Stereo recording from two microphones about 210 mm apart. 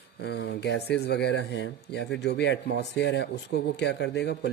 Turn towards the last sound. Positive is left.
turn(degrees=55)  # may be behind; listen again after turning